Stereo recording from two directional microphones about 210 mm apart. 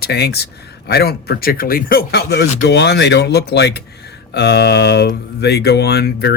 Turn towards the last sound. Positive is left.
turn(degrees=50)  # may be behind; listen again after turning